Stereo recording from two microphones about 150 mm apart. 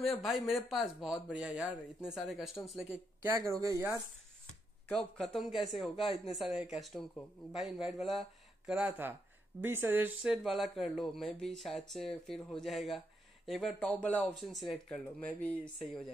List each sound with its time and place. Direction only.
0.0 s speech: centre (ahead or behind)
3.3 s speech: 20° right (ahead or behind)
4.8 s speech: 5° left (ahead or behind)
15.1 s speech: 10° left (ahead or behind)